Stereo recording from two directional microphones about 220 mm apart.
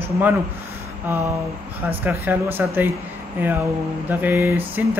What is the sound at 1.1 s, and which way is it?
Speech, 10° right (ahead or behind).